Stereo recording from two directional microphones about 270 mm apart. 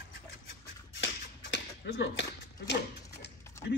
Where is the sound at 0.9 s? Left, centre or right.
Left.